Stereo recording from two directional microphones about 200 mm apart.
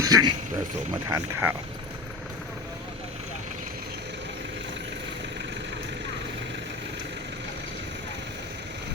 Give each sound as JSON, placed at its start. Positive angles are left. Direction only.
{"t": 0.0, "sound": "speech", "side_deg": -20}